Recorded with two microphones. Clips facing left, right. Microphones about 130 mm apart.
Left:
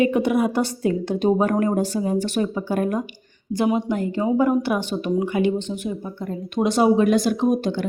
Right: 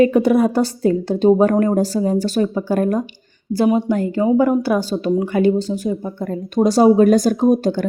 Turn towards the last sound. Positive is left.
turn(degrees=-40)  # may be behind; listen again after turning